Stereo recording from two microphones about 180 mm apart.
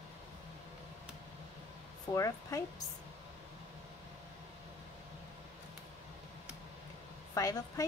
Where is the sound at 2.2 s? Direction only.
20° left (ahead or behind).